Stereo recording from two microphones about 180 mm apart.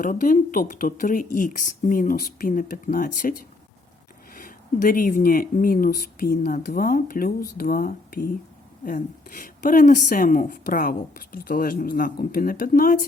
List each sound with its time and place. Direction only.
0.0 s a woman's voice: 45° left (ahead or behind)